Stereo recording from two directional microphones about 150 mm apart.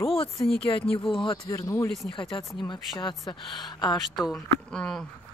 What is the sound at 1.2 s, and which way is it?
Speech, 20° left (ahead or behind).